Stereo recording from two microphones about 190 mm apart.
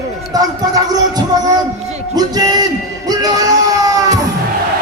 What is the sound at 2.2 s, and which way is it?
Music, 20° right (ahead or behind).